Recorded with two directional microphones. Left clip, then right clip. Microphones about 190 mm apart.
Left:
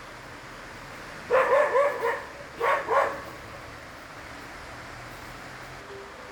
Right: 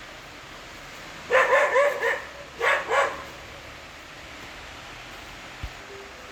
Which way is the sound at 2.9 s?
65° left (ahead or behind).